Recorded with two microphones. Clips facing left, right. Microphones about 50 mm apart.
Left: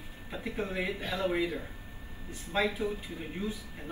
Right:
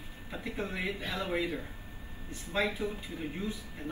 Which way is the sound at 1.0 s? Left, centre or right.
Left.